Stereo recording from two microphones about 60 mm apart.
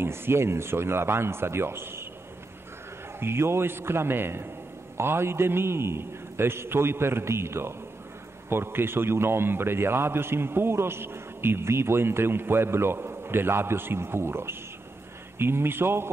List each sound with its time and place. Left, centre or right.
0.0 s a man's voice: right
3.2 s a man's voice: right